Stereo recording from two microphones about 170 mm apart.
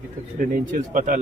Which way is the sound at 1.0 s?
50° right (ahead or behind).